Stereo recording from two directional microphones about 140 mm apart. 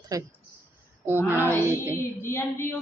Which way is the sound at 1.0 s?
15° right (ahead or behind).